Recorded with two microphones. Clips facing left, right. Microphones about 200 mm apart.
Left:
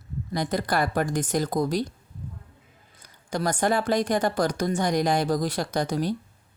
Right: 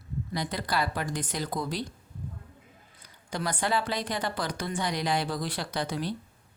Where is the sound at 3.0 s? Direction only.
45° left (ahead or behind).